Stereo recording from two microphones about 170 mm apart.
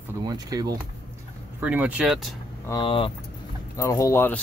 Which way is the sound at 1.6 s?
10° right (ahead or behind).